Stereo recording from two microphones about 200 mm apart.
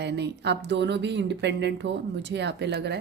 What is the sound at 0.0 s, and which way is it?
Speech, 55° right (ahead or behind).